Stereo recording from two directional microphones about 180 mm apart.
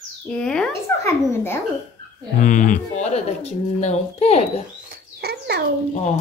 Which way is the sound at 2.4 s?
45° left (ahead or behind).